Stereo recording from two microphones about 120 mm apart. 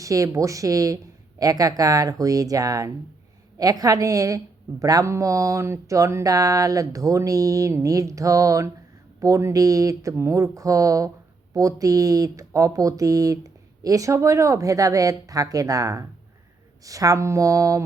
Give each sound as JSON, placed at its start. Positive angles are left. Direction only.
{"t": 0.0, "sound": "speech", "side_deg": -25}